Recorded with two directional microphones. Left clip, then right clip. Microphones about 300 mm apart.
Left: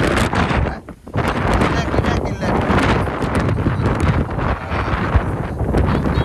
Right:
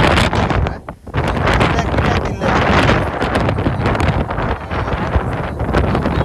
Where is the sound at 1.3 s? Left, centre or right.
Right.